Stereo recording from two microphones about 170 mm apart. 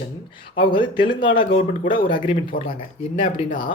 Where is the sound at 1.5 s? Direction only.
55° left (ahead or behind).